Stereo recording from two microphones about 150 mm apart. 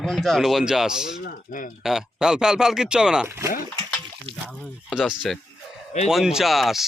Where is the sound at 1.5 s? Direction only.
65° left (ahead or behind).